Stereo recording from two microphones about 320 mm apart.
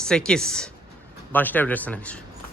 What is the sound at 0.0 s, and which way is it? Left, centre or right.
Speech, centre.